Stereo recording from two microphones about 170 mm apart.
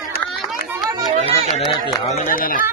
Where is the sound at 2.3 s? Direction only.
55° left (ahead or behind).